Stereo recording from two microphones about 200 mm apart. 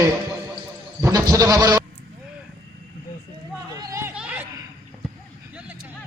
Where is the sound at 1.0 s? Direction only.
15° right (ahead or behind).